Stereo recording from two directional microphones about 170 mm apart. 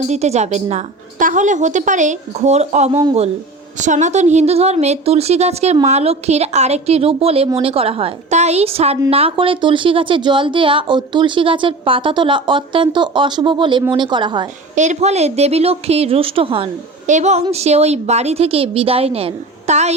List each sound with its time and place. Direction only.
0.1 s a woman's voice: 40° right (ahead or behind)
14.8 s a woman's voice: 40° right (ahead or behind)